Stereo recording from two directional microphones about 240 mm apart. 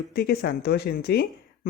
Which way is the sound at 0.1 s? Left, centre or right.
Left.